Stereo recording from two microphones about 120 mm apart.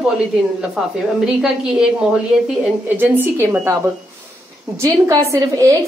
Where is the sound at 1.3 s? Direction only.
5° right (ahead or behind).